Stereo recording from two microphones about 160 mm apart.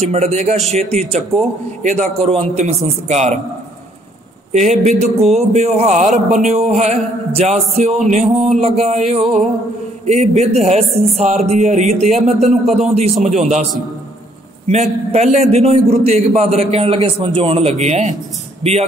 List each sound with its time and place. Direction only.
0.0 s music: 40° right (ahead or behind)
0.7 s a man's voice: 40° right (ahead or behind)
2.0 s a man's voice: centre (ahead or behind)
2.3 s music: 40° right (ahead or behind)
4.5 s music: 45° right (ahead or behind)
8.5 s a man's voice: 40° right (ahead or behind)
10.0 s music: 45° right (ahead or behind)
12.4 s a man's voice: 40° right (ahead or behind)
13.4 s music: 45° right (ahead or behind)
14.7 s a man's voice: 45° right (ahead or behind)